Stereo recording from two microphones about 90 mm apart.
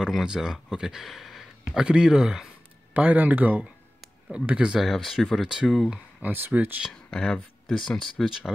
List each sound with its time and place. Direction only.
0.0 s speech: 10° right (ahead or behind)
2.9 s speech: 15° right (ahead or behind)
4.7 s speech: centre (ahead or behind)
6.2 s speech: 20° right (ahead or behind)
6.9 s speech: 5° left (ahead or behind)